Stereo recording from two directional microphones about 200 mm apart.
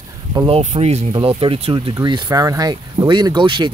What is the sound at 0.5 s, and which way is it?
Speech, 35° right (ahead or behind).